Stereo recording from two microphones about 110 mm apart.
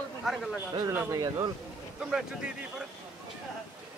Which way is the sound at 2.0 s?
5° right (ahead or behind).